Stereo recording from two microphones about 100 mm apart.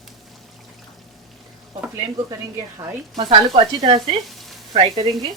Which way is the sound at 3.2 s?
90° right.